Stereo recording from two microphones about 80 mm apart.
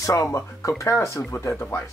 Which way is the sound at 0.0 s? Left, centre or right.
Left.